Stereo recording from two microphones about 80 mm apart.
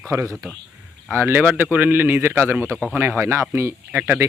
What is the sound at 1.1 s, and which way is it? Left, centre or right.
A man's voice, right.